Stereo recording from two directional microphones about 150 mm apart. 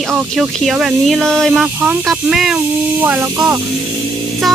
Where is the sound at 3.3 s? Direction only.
25° right (ahead or behind).